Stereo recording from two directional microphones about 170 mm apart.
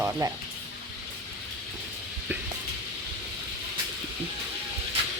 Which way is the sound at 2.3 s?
10° right (ahead or behind).